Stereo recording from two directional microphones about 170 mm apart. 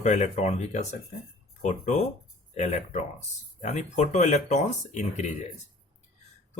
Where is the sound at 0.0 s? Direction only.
45° left (ahead or behind).